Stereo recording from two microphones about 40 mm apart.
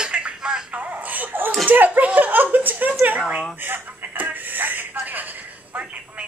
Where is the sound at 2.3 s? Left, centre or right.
Right.